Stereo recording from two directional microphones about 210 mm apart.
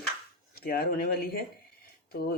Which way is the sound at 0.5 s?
45° left (ahead or behind).